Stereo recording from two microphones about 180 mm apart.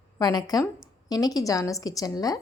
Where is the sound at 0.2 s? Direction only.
20° left (ahead or behind).